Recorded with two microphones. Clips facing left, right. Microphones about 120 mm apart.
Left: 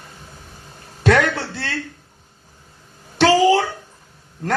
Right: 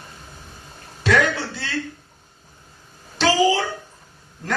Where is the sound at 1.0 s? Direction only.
60° left (ahead or behind).